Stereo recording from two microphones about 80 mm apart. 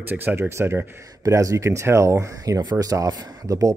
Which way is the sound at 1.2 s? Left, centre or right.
Right.